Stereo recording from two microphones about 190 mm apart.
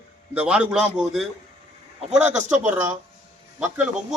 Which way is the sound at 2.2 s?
40° right (ahead or behind).